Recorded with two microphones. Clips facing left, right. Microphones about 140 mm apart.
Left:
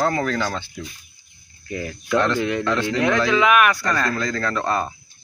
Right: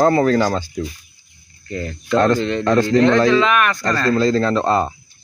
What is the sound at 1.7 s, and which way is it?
Speech, 10° left (ahead or behind).